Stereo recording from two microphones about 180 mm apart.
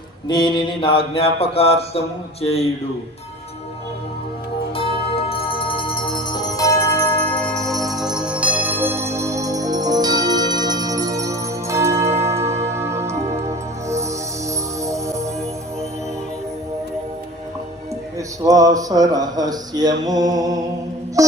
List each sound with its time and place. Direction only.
0.3 s mantra: 25° left (ahead or behind)
4.7 s music: 30° left (ahead or behind); by 13.1 s 15° right (ahead or behind)
14.8 s music: 15° right (ahead or behind)
18.4 s a sound: 20° right (ahead or behind)
21.2 s music: 20° right (ahead or behind)